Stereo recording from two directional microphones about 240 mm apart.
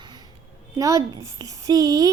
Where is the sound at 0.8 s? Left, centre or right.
Centre.